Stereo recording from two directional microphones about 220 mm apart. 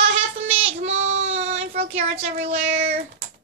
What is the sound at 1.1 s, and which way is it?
Child singing, 60° right (ahead or behind).